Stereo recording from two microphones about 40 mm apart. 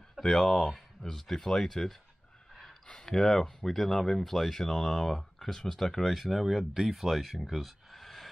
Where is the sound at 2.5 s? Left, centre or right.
Centre.